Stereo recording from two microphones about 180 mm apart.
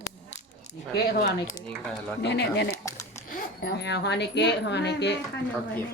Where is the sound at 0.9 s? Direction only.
65° left (ahead or behind).